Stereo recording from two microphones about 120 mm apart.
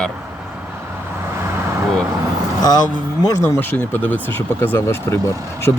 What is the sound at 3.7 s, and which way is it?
Speech, 15° left (ahead or behind).